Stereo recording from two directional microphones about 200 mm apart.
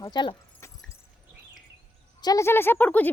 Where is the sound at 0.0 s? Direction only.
20° left (ahead or behind).